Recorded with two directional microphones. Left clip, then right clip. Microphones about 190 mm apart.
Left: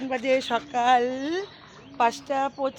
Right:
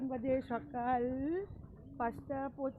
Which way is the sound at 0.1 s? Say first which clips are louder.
Left 14 dB; 5° left (ahead or behind).